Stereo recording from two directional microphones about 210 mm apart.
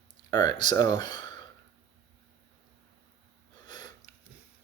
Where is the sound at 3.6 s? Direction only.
20° left (ahead or behind).